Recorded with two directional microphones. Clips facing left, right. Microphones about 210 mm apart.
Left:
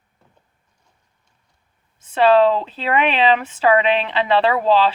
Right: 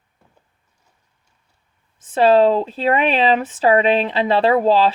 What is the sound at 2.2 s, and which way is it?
Speech, 45° right (ahead or behind).